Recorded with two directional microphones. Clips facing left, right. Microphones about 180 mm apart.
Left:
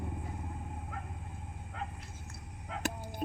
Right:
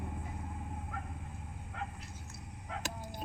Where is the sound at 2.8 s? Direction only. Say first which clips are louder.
Left 8 dB; 60° left (ahead or behind).